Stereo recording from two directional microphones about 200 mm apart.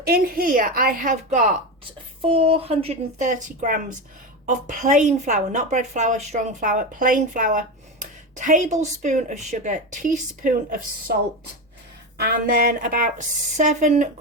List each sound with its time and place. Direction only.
0.0 s speech: 50° right (ahead or behind)
2.2 s speech: 25° right (ahead or behind)
3.2 s a woman's voice: 45° right (ahead or behind)
12.1 s speech: 50° right (ahead or behind)